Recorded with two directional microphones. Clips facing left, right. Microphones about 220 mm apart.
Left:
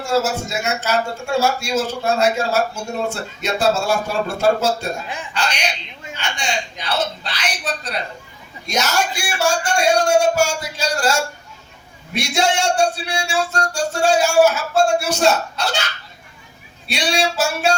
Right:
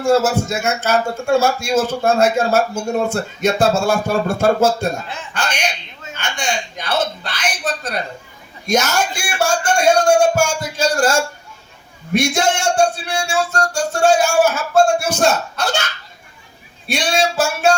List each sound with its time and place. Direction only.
0.0 s a man's voice: 50° right (ahead or behind)
5.0 s speech: 15° left (ahead or behind)
5.3 s a sound: 50° right (ahead or behind)
6.1 s a man's voice: 50° right (ahead or behind)
16.8 s a man's voice: 50° right (ahead or behind)